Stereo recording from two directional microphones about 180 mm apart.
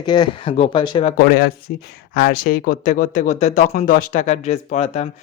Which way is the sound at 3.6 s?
55° left (ahead or behind).